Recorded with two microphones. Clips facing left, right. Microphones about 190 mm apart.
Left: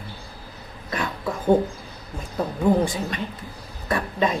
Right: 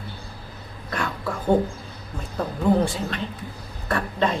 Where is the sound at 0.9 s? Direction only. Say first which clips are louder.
Left 1 dB; 15° left (ahead or behind).